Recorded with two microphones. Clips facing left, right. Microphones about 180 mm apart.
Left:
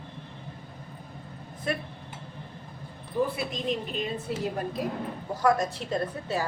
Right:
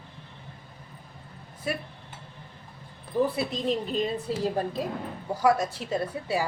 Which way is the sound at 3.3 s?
35° right (ahead or behind).